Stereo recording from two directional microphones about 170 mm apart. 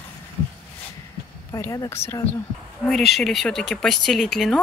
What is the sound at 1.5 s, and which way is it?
Speech, 20° left (ahead or behind).